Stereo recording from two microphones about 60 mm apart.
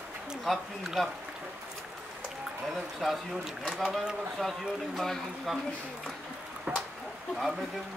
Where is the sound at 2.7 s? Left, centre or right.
Centre.